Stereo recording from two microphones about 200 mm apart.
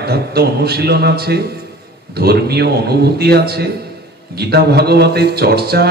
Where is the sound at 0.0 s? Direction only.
50° right (ahead or behind).